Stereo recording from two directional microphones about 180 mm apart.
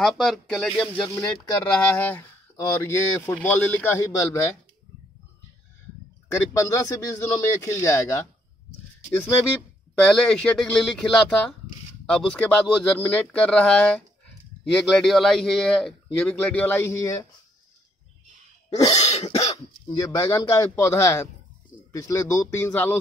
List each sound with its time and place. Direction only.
0.0 s a man's voice: centre (ahead or behind)
6.3 s a man's voice: 15° left (ahead or behind)
9.9 s speech: 5° left (ahead or behind)
18.9 s speech: 35° left (ahead or behind)
20.0 s a man's voice: 20° left (ahead or behind)